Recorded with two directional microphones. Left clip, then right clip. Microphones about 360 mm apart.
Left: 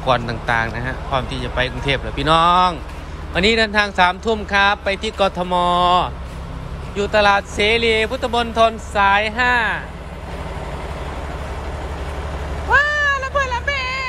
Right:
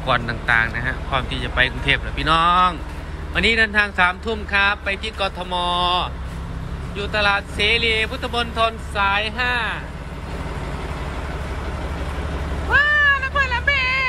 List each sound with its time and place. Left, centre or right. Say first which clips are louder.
0.0 s speech: left 2 dB; centre
12.7 s cat: even; centre